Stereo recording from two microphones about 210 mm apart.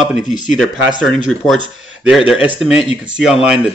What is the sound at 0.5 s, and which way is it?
Speech, centre (ahead or behind).